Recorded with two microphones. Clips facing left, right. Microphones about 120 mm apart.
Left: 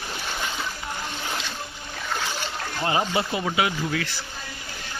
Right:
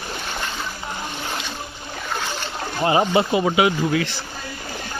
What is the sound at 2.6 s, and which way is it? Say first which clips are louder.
Speech: right 6 dB; 25° right (ahead or behind).